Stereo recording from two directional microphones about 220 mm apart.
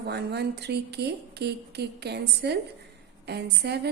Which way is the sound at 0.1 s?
50° right (ahead or behind).